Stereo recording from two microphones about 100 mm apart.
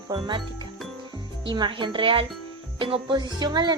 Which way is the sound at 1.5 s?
50° right (ahead or behind).